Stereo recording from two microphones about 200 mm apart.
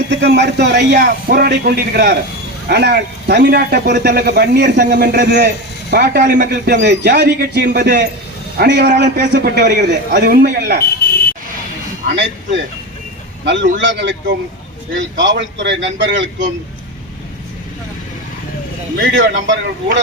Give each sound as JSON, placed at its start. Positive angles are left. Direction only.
{"t": 0.2, "sound": "a man's voice", "side_deg": -60}
{"t": 11.0, "sound": "buzzer", "side_deg": 50}
{"t": 12.1, "sound": "a man's voice", "side_deg": -65}
{"t": 18.9, "sound": "a man's voice", "side_deg": -65}